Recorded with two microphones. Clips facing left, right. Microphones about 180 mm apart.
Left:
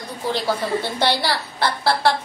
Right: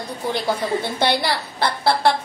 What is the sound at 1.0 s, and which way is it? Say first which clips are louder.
A woman's voice: right 1 dB; 15° right (ahead or behind).